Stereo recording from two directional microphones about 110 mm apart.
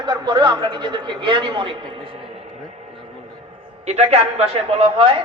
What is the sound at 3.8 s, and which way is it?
A man's voice, 75° right (ahead or behind).